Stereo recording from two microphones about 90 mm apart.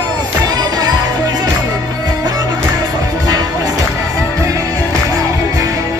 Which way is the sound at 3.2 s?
45° right (ahead or behind).